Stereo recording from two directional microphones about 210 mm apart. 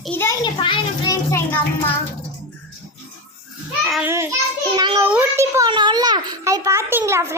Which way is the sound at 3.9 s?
10° right (ahead or behind).